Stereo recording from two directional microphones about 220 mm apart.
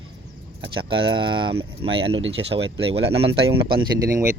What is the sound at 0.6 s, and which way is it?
Speech, 25° right (ahead or behind).